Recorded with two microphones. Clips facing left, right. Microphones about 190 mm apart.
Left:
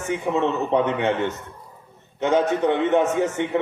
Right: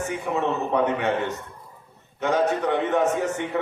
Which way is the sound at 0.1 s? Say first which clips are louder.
Left 6 dB; 20° left (ahead or behind).